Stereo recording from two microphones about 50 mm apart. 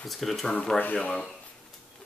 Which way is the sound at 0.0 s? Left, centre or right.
Centre.